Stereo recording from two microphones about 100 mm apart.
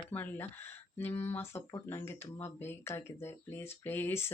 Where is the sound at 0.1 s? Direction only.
20° left (ahead or behind).